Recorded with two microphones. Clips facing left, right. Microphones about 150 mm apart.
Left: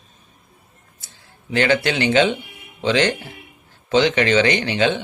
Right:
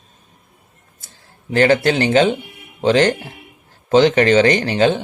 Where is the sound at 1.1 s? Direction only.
40° right (ahead or behind).